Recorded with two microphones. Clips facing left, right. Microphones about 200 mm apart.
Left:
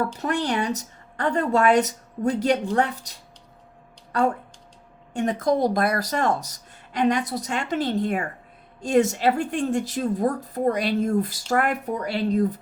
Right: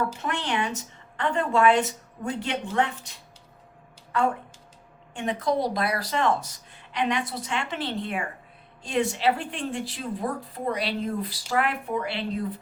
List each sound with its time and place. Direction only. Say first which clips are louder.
0.2 s speech: left 4 dB; 40° left (ahead or behind)
5.1 s a woman's voice: left 4 dB; 45° left (ahead or behind)